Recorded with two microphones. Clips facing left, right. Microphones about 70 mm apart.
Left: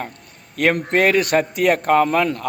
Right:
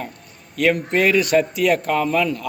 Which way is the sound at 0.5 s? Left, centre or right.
Left.